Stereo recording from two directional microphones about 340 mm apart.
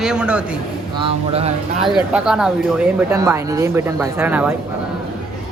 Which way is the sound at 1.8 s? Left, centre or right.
Centre.